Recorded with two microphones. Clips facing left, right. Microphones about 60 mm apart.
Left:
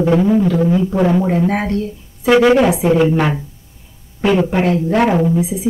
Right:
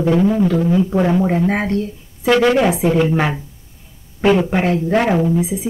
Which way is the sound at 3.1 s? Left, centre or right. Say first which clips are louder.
Left 2 dB; centre.